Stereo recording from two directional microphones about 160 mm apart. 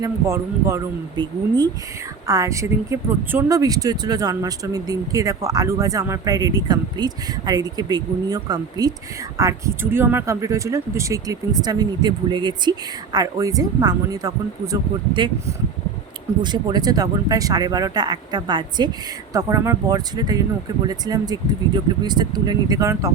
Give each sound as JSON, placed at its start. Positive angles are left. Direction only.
{"t": 0.0, "sound": "speech", "side_deg": -15}
{"t": 1.1, "sound": "speech", "side_deg": -30}
{"t": 16.4, "sound": "speech", "side_deg": -25}